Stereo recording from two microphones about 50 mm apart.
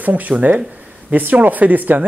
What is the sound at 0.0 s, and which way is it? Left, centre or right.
Speech, right.